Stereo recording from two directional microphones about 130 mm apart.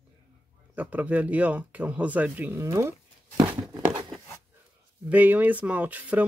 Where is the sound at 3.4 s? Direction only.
35° right (ahead or behind).